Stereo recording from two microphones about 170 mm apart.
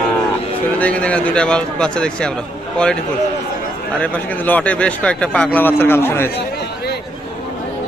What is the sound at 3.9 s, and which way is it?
Speech, 10° left (ahead or behind).